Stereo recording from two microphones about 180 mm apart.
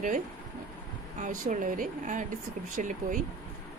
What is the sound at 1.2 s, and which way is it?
A woman's voice, 45° right (ahead or behind).